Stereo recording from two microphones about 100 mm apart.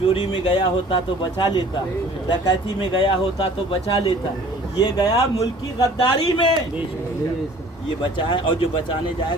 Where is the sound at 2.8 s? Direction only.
60° left (ahead or behind).